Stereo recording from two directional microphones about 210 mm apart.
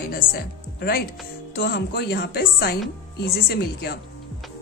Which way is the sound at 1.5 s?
45° left (ahead or behind).